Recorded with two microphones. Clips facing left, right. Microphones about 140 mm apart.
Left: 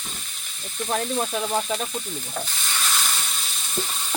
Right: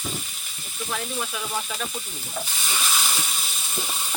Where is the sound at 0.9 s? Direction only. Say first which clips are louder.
Left 6 dB; 40° left (ahead or behind).